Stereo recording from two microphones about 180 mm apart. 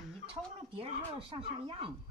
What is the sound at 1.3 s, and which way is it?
Speech, 30° right (ahead or behind).